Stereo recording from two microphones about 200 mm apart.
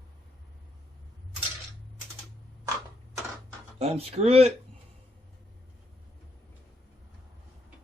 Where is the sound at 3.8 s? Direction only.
30° right (ahead or behind).